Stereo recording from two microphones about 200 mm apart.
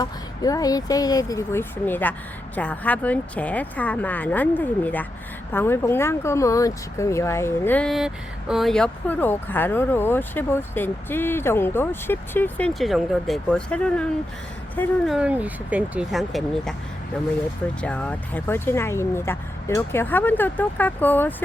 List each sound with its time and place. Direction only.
0.0 s speech: 20° left (ahead or behind); by 16.7 s centre (ahead or behind)
17.7 s speech: 5° left (ahead or behind)